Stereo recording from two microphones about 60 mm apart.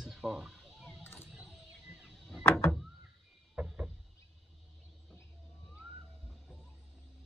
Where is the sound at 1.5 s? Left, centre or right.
Centre.